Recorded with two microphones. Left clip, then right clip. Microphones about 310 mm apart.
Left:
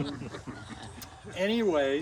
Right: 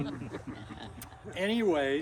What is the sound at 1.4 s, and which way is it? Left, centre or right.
Speech, centre.